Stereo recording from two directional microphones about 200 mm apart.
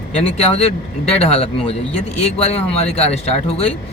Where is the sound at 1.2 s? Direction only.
30° left (ahead or behind).